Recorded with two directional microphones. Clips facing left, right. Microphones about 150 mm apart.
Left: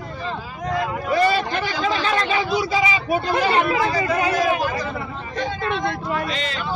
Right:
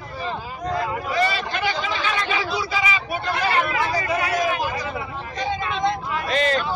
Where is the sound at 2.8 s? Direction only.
30° left (ahead or behind).